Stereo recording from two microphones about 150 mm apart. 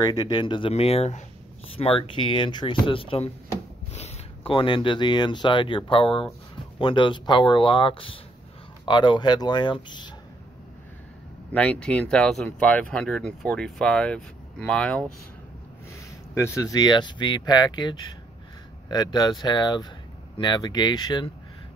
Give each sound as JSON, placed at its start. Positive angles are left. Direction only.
{"t": 0.0, "sound": "speech", "side_deg": 25}
{"t": 11.5, "sound": "speech", "side_deg": 10}
{"t": 15.9, "sound": "speech", "side_deg": 20}